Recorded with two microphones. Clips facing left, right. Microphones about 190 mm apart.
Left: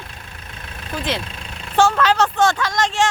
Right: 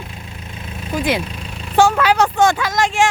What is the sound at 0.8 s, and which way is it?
Speech, 10° right (ahead or behind).